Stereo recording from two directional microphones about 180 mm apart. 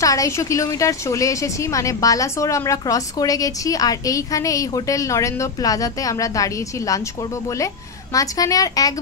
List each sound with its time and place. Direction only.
0.0 s a woman's voice: 20° left (ahead or behind)